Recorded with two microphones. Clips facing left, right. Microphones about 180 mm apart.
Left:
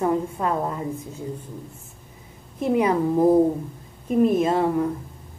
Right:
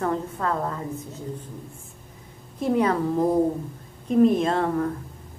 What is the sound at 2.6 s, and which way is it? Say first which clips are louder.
A woman's voice: left 2 dB; 10° left (ahead or behind).